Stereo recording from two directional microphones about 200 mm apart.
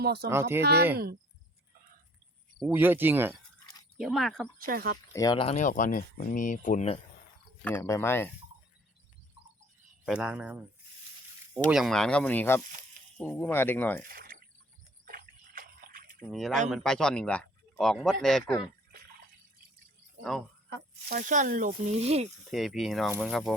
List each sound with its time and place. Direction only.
0.0 s speech: 55° right (ahead or behind)
0.3 s speech: 15° right (ahead or behind)
0.6 s speech: 55° right (ahead or behind)
2.6 s speech: 10° right (ahead or behind)
4.6 s speech: 45° right (ahead or behind)
5.1 s speech: 20° left (ahead or behind)
5.6 s speech: 40° left (ahead or behind)
7.6 s speech: 10° left (ahead or behind)
10.1 s speech: 5° right (ahead or behind)
11.7 s speech: centre (ahead or behind)
14.1 s a sound: 45° right (ahead or behind)
16.2 s speech: centre (ahead or behind)
20.7 s speech: 45° right (ahead or behind)
22.5 s speech: centre (ahead or behind)